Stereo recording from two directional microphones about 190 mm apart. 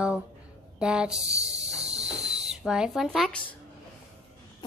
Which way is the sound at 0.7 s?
5° right (ahead or behind).